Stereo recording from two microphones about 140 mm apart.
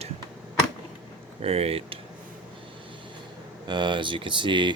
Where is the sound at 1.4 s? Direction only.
45° right (ahead or behind).